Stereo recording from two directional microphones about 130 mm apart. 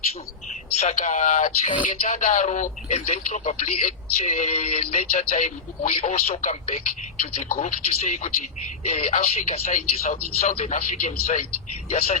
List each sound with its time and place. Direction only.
0.8 s a man's voice: 65° left (ahead or behind)